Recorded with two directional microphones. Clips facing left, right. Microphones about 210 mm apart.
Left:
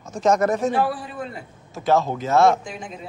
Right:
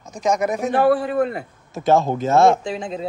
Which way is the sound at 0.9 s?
60° right (ahead or behind).